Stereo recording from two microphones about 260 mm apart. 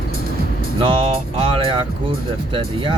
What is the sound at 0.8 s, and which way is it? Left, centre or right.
Music, right.